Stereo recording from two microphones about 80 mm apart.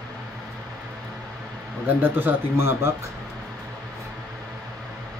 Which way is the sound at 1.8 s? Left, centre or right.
Right.